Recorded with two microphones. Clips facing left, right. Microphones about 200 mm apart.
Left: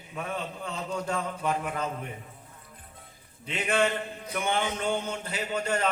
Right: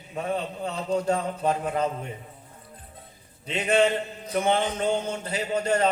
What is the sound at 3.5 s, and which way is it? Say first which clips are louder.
A man's voice: right 5 dB; 30° right (ahead or behind).